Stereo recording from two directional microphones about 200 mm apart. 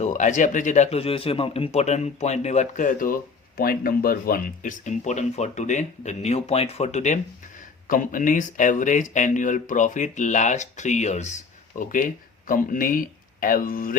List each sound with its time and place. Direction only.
0.0 s speech: 35° left (ahead or behind)